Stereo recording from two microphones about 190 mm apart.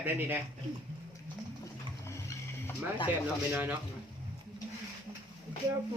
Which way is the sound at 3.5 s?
10° right (ahead or behind).